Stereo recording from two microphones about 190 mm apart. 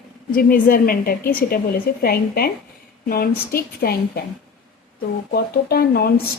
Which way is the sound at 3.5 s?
55° left (ahead or behind).